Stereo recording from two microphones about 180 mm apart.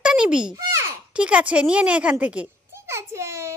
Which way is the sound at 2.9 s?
15° right (ahead or behind).